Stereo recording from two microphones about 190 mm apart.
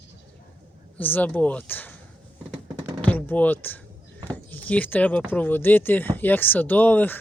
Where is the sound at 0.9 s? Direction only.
10° left (ahead or behind).